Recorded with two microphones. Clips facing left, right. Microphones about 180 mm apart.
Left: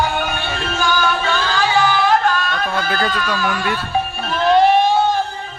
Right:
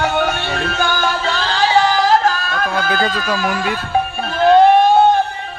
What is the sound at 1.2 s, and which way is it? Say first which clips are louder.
Music: right 1 dB; 30° right (ahead or behind).